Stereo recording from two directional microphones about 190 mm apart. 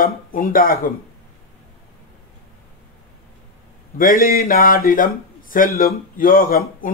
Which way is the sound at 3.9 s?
50° left (ahead or behind).